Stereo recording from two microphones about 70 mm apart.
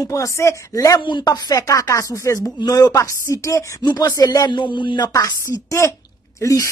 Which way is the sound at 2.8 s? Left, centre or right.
Left.